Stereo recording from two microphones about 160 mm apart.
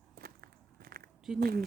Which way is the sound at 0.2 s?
70° right (ahead or behind).